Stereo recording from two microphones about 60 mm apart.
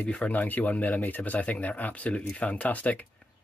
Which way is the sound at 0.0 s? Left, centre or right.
Left.